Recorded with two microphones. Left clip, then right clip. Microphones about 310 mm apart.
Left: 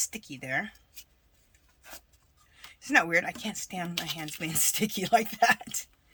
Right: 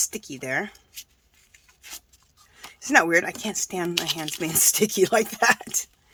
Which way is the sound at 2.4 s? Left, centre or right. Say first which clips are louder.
Right 7 dB; centre.